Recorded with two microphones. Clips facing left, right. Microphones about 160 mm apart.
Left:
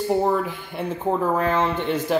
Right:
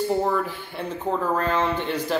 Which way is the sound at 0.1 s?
15° left (ahead or behind).